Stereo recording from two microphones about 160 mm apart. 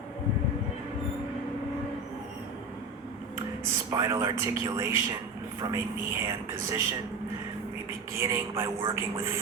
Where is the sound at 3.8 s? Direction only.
20° right (ahead or behind).